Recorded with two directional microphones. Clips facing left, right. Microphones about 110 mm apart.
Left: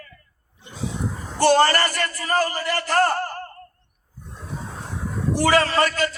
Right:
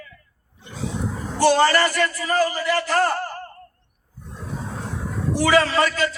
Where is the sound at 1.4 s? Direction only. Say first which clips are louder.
Even; 50° left (ahead or behind).